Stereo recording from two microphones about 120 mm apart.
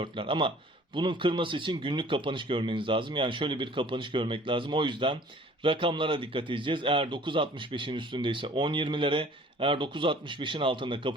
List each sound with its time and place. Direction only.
0.0 s a man's voice: 45° right (ahead or behind)